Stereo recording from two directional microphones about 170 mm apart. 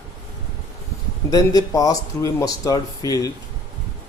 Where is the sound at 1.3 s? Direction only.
20° left (ahead or behind).